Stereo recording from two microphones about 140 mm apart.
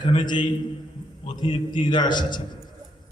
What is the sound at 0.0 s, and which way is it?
A man's voice, 35° left (ahead or behind).